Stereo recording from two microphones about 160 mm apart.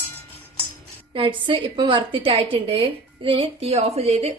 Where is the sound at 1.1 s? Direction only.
35° right (ahead or behind).